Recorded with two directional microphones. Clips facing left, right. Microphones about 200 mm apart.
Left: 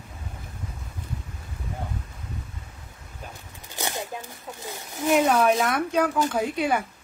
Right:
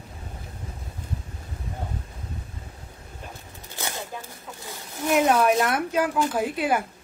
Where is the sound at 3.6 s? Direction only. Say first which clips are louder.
Left 3 dB; 15° left (ahead or behind).